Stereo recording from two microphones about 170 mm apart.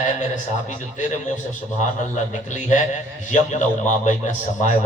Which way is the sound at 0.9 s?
45° left (ahead or behind).